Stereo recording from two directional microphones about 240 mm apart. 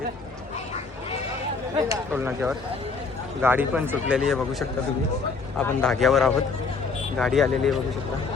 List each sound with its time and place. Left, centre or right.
1.9 s speech: centre
5.5 s speech: centre